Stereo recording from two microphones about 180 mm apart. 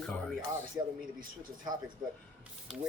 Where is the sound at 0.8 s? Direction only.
15° right (ahead or behind).